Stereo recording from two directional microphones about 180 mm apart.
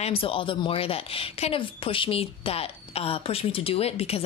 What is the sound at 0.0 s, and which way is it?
Speech, 30° left (ahead or behind).